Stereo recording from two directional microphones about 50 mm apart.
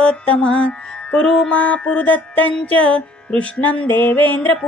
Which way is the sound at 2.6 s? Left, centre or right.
Left.